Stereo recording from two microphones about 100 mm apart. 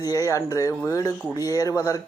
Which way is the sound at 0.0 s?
35° left (ahead or behind).